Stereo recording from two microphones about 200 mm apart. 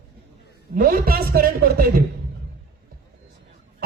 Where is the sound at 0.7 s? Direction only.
45° right (ahead or behind).